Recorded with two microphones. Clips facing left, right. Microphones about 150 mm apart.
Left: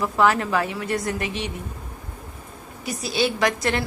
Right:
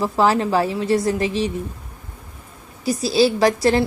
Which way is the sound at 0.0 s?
30° right (ahead or behind).